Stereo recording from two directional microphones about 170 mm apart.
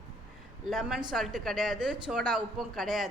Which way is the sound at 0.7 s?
Centre (ahead or behind).